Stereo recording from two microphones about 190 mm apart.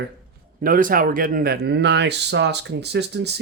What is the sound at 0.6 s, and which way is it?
Speech, 45° right (ahead or behind).